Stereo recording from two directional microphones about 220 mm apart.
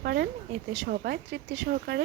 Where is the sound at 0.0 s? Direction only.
45° right (ahead or behind).